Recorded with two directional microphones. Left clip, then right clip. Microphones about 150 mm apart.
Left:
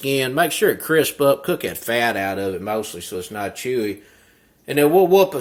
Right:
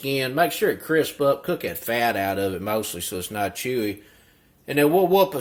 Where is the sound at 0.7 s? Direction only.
25° left (ahead or behind); by 2.3 s centre (ahead or behind).